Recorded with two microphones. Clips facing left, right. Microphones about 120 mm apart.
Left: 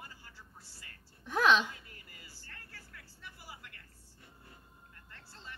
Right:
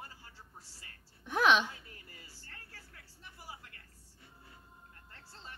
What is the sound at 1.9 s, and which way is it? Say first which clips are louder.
Vehicle: right 1 dB; 30° right (ahead or behind).